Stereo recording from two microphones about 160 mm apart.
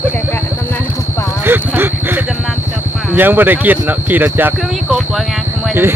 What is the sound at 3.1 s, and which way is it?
Speech, 10° right (ahead or behind).